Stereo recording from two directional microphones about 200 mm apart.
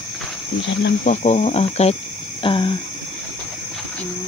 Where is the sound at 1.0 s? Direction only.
35° left (ahead or behind).